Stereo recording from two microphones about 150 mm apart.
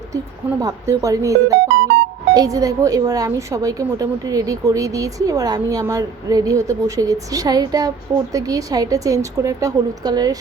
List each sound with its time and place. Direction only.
0.6 s speech: 25° right (ahead or behind)